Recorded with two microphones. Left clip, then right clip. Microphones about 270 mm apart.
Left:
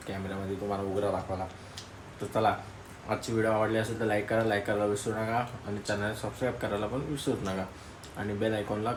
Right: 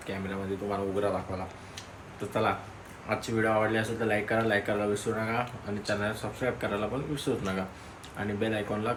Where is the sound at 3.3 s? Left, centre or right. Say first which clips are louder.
Right 1 dB; centre.